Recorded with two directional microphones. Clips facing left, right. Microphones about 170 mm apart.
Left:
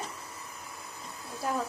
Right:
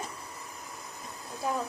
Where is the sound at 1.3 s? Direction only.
15° right (ahead or behind).